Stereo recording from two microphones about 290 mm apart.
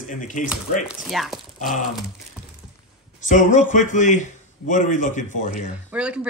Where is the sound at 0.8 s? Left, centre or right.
Centre.